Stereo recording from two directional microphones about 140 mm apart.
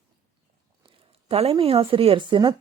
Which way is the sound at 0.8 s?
45° right (ahead or behind).